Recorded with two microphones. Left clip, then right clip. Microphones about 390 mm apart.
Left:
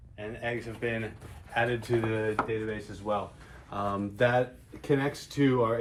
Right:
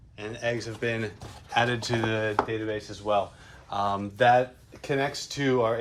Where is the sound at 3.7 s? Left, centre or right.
Centre.